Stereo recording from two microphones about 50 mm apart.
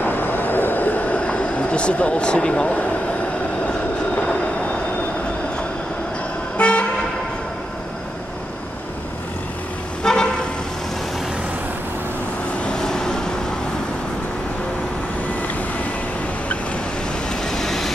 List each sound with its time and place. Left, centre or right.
0.0 s vehicle: left; by 2.8 s centre
4.1 s train: centre
6.6 s vehicle: left
10.0 s vehicle: centre
12.5 s vehicle: centre
17.3 s vehicle: centre